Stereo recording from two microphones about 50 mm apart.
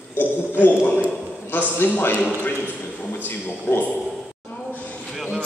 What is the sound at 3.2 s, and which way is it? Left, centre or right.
Speech, left.